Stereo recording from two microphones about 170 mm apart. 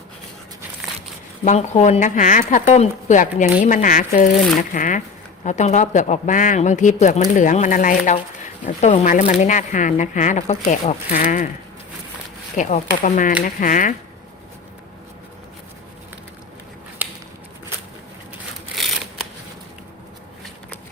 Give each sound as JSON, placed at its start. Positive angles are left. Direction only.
{"t": 1.5, "sound": "speech", "side_deg": 40}
{"t": 12.5, "sound": "speech", "side_deg": 45}